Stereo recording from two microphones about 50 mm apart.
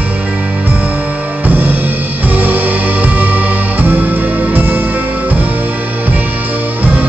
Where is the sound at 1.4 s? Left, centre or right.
Right.